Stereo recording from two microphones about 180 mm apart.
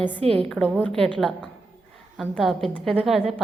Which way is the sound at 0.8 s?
5° left (ahead or behind).